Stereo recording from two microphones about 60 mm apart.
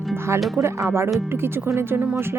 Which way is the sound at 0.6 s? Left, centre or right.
Right.